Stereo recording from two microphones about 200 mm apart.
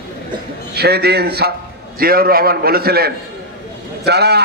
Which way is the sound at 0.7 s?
55° right (ahead or behind).